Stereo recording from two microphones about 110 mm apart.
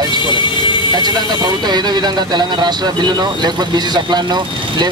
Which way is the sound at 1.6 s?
40° right (ahead or behind).